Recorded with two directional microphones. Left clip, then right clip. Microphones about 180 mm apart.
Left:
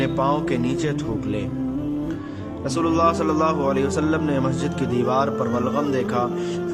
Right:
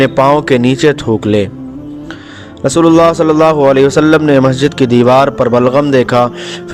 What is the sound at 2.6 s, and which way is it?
Speech, 45° right (ahead or behind).